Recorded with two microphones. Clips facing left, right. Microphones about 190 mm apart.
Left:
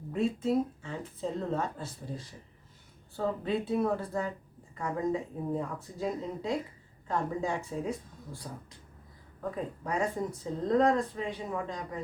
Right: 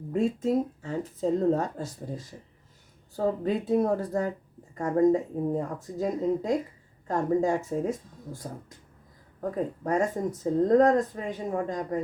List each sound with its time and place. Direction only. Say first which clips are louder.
0.1 s speech: right 3 dB; 45° right (ahead or behind)